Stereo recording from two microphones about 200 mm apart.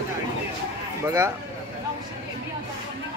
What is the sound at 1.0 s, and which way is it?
Speech, 15° right (ahead or behind).